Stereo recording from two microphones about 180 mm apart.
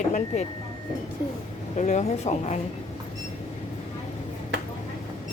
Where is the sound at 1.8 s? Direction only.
40° left (ahead or behind).